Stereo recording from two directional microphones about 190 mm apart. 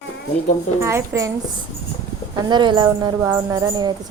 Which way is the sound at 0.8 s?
15° right (ahead or behind).